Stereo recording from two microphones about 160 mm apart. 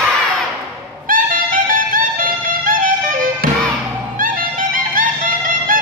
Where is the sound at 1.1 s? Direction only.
55° right (ahead or behind).